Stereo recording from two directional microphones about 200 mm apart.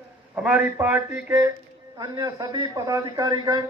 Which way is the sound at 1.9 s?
20° right (ahead or behind).